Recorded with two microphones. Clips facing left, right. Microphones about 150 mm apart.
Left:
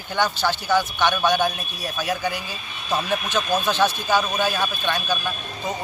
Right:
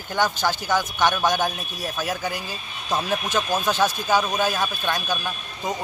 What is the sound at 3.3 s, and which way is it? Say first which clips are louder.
Speech: left 1 dB; 10° right (ahead or behind).